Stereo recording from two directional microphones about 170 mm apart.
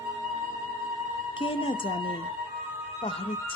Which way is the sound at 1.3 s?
30° left (ahead or behind).